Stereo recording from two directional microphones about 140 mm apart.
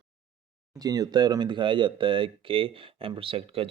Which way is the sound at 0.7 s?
25° right (ahead or behind).